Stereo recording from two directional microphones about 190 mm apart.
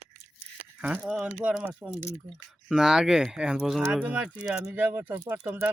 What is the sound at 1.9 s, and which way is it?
Speech, 5° left (ahead or behind).